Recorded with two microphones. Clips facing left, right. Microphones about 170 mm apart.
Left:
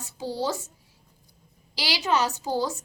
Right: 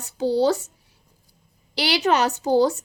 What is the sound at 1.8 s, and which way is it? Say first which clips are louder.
A woman's voice: right 5 dB; 60° right (ahead or behind).